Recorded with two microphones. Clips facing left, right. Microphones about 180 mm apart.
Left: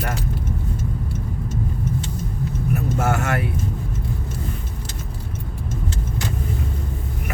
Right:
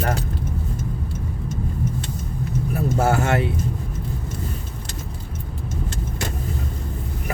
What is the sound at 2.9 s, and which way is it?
Speech, 30° right (ahead or behind).